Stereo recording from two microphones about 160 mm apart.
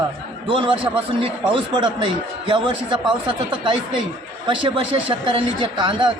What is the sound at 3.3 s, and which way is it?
Speech, 30° right (ahead or behind).